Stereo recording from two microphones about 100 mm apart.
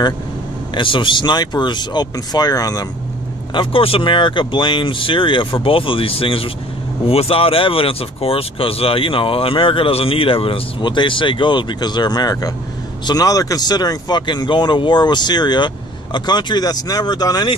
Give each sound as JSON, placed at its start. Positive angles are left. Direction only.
{"t": 0.7, "sound": "speech", "side_deg": 55}
{"t": 3.5, "sound": "speech", "side_deg": 70}